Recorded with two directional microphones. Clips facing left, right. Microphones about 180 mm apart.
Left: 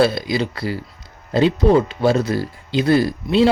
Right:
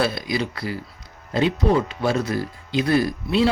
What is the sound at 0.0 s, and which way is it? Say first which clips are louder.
Speech: left 6 dB; 30° left (ahead or behind).